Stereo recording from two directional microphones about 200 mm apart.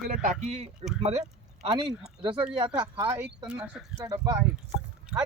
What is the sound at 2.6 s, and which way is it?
Speech, 25° right (ahead or behind).